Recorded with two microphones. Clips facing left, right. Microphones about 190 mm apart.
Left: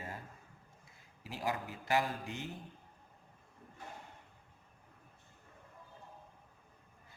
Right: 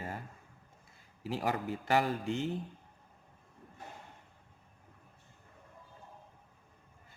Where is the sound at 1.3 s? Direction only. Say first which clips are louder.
Right 5 dB; 65° right (ahead or behind).